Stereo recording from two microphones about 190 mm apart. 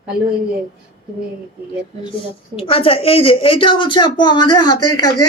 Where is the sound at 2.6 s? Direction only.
30° left (ahead or behind).